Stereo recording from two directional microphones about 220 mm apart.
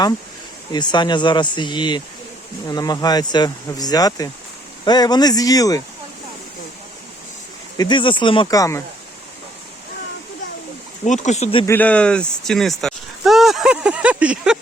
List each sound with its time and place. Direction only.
0.7 s speech: 20° left (ahead or behind)
7.8 s speech: 20° left (ahead or behind)
11.0 s speech: 35° left (ahead or behind)
11.6 s speech: 10° left (ahead or behind)